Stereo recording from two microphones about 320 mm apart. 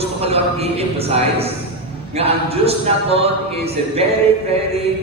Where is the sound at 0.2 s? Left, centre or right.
Centre.